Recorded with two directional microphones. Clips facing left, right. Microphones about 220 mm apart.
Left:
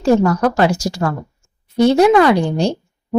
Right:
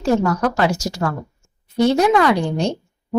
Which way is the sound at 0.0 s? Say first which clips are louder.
Left 4 dB; 35° left (ahead or behind).